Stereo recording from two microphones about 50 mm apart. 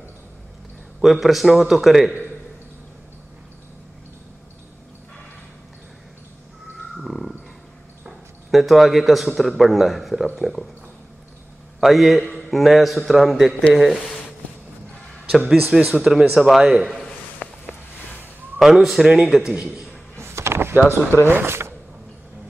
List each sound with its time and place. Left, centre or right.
1.0 s a man's voice: centre
7.1 s a sound: centre
8.5 s a man's voice: centre
11.8 s a man's voice: centre
15.7 s speech: centre
16.4 s a man's voice: centre
17.4 s a sound: left
18.6 s a man's voice: centre
20.2 s power windows: right
20.7 s speech: right